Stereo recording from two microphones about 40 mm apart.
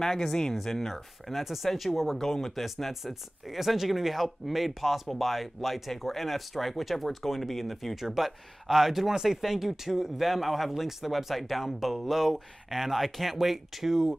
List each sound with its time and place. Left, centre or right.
0.0 s speech: centre